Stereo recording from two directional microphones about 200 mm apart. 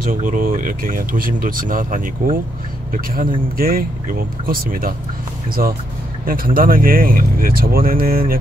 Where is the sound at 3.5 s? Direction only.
45° right (ahead or behind).